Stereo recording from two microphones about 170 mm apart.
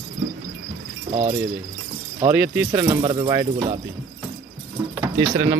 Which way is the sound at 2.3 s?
10° right (ahead or behind).